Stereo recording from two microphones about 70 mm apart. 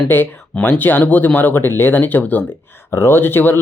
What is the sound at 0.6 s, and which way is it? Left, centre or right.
Speech, left.